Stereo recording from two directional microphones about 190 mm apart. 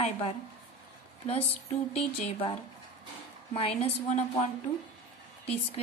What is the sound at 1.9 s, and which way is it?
Speech, 30° left (ahead or behind).